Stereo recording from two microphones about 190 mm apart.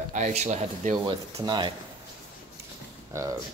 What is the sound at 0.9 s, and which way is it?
Speech, 25° right (ahead or behind).